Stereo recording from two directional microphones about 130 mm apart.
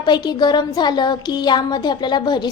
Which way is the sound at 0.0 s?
35° left (ahead or behind).